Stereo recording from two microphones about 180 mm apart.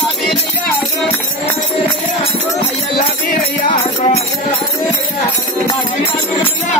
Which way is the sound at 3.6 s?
35° left (ahead or behind).